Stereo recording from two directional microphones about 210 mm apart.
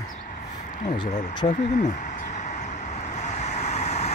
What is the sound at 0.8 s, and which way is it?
Speech, 35° left (ahead or behind).